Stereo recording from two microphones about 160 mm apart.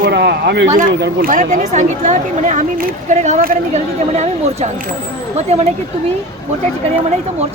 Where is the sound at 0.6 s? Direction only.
55° right (ahead or behind).